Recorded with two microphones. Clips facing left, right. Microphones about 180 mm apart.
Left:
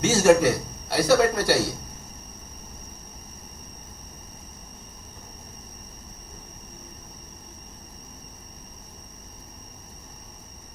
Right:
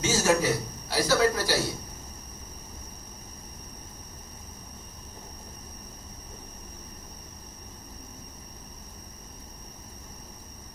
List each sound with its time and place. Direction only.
0.0 s a man's voice: 55° left (ahead or behind)